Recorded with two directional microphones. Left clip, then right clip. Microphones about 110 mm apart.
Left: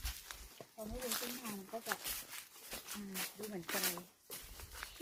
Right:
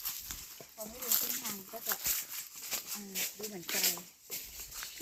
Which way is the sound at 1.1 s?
10° right (ahead or behind).